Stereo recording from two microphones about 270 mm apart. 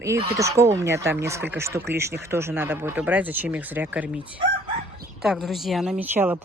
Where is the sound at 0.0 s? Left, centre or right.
Centre.